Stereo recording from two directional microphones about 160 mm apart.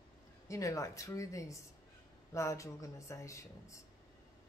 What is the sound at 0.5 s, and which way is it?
Speech, 20° left (ahead or behind).